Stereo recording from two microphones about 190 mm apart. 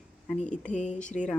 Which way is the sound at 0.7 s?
40° left (ahead or behind).